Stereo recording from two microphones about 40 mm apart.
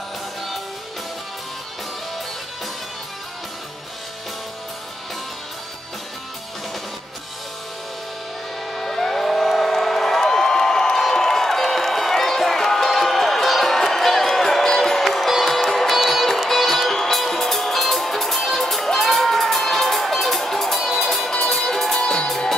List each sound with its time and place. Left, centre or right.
8.7 s music: centre
22.0 s music: centre